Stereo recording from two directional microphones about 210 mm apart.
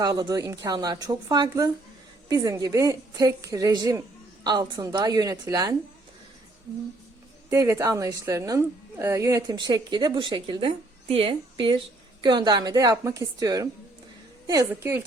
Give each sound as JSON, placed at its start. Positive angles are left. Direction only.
{"t": 0.0, "sound": "speech", "side_deg": -20}
{"t": 7.5, "sound": "a woman's voice", "side_deg": -15}